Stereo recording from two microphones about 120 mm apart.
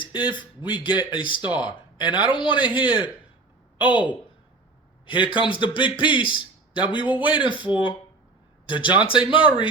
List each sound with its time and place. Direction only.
0.0 s a man's voice: 40° left (ahead or behind)
5.0 s a man's voice: 45° left (ahead or behind)